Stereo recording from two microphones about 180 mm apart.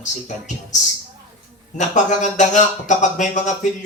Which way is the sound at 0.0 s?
40° left (ahead or behind).